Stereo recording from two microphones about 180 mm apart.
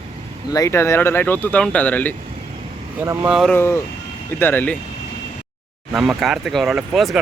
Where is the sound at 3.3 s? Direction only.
Centre (ahead or behind).